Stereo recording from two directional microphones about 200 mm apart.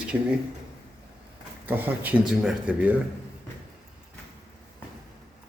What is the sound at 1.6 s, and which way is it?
Speech, 10° right (ahead or behind).